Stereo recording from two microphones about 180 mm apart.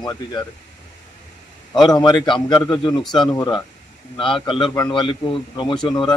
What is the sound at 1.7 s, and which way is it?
A man's voice, 20° left (ahead or behind).